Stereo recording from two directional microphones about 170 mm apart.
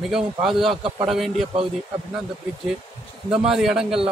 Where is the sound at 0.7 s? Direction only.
35° right (ahead or behind).